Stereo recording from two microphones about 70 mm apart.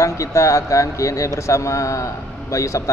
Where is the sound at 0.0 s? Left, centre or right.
Left.